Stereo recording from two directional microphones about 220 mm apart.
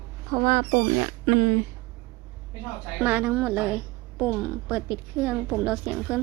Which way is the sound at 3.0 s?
5° right (ahead or behind).